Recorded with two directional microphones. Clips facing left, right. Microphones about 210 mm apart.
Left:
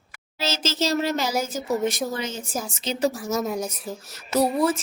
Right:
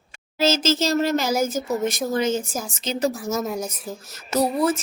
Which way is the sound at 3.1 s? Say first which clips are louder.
Even; centre (ahead or behind).